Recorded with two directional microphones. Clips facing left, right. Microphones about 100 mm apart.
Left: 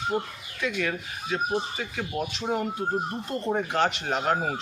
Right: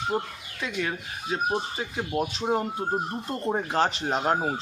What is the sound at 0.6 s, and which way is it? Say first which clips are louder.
Speech: left 2 dB; 30° right (ahead or behind).